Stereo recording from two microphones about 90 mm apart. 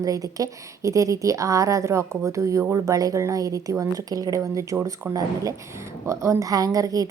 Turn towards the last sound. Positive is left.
turn(degrees=-40)  # may be behind; listen again after turning